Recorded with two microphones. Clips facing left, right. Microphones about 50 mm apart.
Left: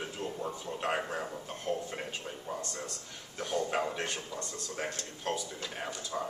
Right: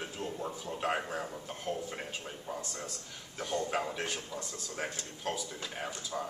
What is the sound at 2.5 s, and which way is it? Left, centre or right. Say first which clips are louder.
Speech: left 2 dB; centre.